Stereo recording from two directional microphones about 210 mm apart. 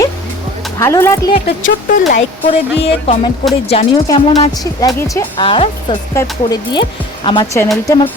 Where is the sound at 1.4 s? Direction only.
40° left (ahead or behind).